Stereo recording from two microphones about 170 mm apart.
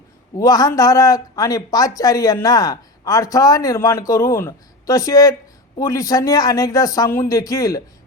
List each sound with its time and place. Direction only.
0.3 s speech: 20° left (ahead or behind)